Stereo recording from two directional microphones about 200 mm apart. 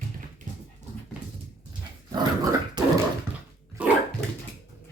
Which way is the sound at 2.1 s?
20° right (ahead or behind).